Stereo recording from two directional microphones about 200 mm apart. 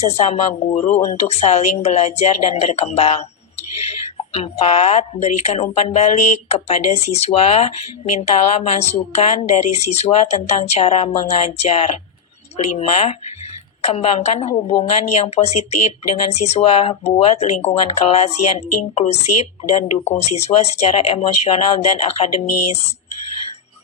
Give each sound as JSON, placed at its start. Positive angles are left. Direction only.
{"t": 0.0, "sound": "speech", "side_deg": 35}